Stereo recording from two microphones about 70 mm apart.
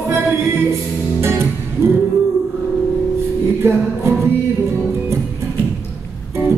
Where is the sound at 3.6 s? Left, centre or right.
Right.